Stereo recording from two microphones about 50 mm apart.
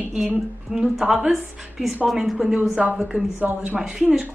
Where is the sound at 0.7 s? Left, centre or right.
Centre.